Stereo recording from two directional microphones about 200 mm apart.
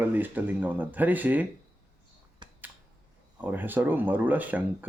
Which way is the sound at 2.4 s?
20° right (ahead or behind).